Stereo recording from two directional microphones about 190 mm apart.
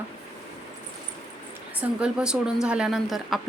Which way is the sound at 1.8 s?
5° right (ahead or behind).